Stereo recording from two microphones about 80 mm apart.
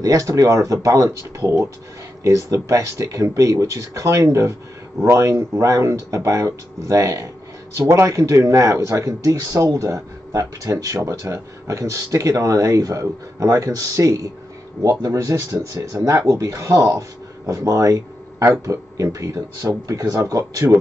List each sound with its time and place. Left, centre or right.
0.0 s speech: right